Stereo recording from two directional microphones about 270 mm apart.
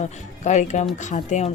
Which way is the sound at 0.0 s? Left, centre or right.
Left.